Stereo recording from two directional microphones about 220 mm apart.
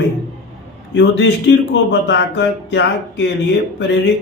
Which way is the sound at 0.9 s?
50° left (ahead or behind).